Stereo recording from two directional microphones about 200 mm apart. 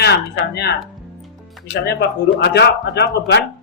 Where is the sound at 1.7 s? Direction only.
55° left (ahead or behind).